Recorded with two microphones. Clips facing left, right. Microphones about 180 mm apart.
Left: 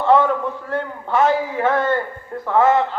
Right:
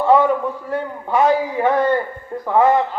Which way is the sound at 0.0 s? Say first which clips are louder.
Right 1 dB; 10° right (ahead or behind).